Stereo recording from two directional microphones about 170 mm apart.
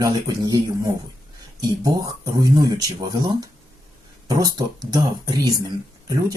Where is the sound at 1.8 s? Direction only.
20° right (ahead or behind).